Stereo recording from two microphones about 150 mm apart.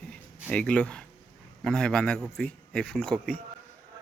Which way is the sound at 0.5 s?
10° left (ahead or behind).